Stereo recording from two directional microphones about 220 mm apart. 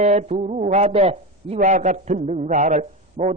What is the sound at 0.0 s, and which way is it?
Speech, 30° right (ahead or behind).